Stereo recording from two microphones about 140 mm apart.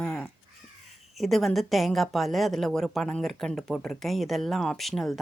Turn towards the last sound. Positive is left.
turn(degrees=0)  # may be behind; listen again after turning